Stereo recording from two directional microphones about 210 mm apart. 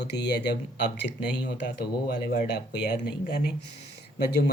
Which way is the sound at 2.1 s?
50° left (ahead or behind).